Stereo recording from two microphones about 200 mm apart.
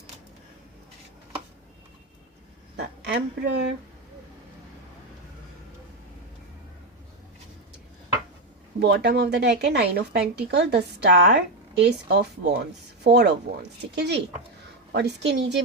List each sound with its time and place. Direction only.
2.7 s a woman's voice: 60° right (ahead or behind)
8.8 s a woman's voice: 55° right (ahead or behind)